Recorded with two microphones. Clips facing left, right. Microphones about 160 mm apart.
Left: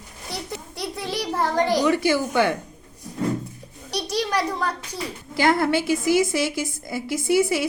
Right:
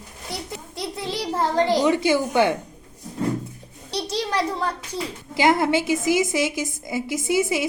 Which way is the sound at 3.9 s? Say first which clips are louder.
Left 1 dB; 25° right (ahead or behind).